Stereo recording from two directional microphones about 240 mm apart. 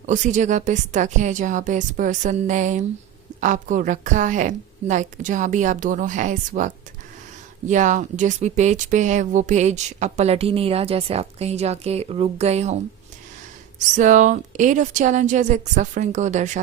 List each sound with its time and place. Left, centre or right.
0.1 s a woman's voice: right